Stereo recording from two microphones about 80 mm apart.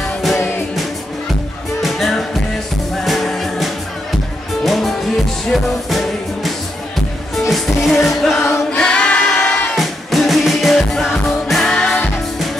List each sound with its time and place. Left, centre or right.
1.8 s music: centre
8.7 s crowd: centre
9.8 s music: centre